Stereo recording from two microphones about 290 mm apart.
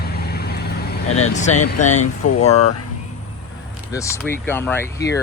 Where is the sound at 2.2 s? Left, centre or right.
Left.